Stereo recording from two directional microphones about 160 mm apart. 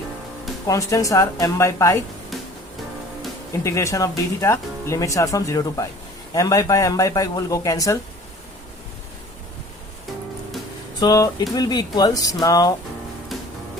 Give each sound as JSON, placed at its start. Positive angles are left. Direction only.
{"t": 0.7, "sound": "speech", "side_deg": 20}
{"t": 3.5, "sound": "speech", "side_deg": 20}
{"t": 11.0, "sound": "speech", "side_deg": 25}